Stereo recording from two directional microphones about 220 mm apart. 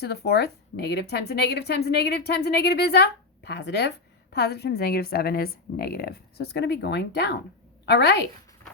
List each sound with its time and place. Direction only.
0.0 s speech: 45° left (ahead or behind)